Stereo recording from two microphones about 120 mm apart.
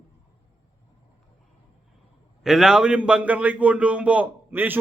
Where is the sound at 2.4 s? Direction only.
5° right (ahead or behind).